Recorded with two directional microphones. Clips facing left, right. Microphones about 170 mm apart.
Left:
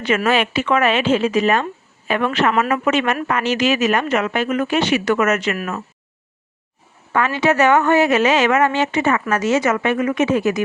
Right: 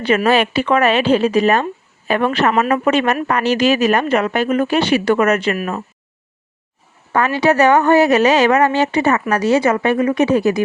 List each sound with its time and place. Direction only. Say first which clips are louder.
0.3 s speech: right 2 dB; 35° right (ahead or behind)
7.1 s speech: right 3 dB; 35° right (ahead or behind)